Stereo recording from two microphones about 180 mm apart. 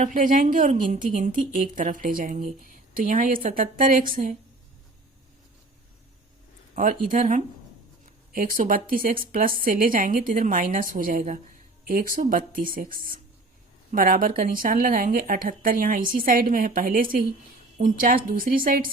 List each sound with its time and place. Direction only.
0.0 s a woman's voice: 45° right (ahead or behind)
7.1 s a woman's voice: 45° right (ahead or behind)